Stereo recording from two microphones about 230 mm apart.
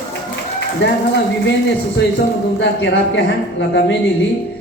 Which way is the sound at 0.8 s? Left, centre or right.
Left.